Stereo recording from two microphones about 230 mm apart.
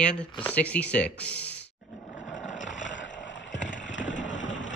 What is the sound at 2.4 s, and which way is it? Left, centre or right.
Roar, left.